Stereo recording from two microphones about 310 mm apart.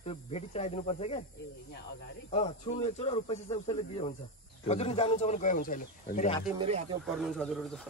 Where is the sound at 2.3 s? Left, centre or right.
Centre.